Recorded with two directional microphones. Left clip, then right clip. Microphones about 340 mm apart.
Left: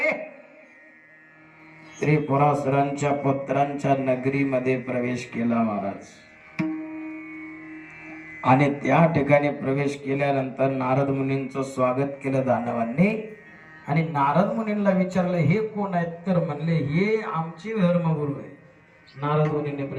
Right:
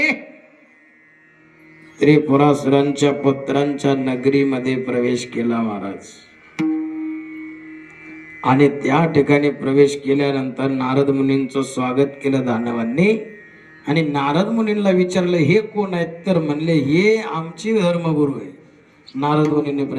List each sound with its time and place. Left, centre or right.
2.0 s a man's voice: right
8.0 s a man's voice: centre